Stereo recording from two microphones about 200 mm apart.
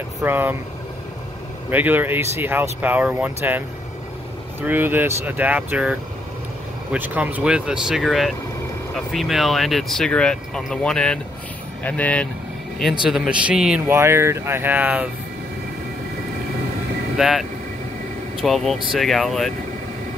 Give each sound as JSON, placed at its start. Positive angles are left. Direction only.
{"t": 0.2, "sound": "speech", "side_deg": -10}
{"t": 1.7, "sound": "speech", "side_deg": -10}
{"t": 17.2, "sound": "speech", "side_deg": 0}